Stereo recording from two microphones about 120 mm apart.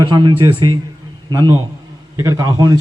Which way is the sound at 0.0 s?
40° right (ahead or behind).